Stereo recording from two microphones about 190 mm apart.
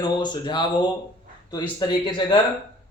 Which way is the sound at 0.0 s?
25° left (ahead or behind).